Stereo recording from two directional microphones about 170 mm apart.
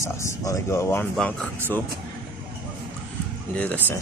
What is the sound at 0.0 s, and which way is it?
Speech, 20° left (ahead or behind).